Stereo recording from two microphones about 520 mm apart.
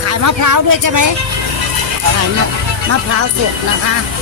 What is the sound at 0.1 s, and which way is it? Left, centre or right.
Speech, right.